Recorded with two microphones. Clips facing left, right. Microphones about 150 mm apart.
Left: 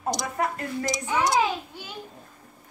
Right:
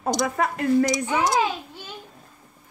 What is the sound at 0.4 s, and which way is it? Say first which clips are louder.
Speech: right 8 dB; 90° right.